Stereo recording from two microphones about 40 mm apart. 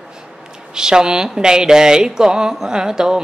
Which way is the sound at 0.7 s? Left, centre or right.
Centre.